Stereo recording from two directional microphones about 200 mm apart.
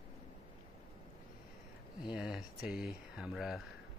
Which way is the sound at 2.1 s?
5° right (ahead or behind).